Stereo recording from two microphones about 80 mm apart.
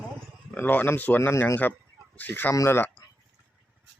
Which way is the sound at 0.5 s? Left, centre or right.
Left.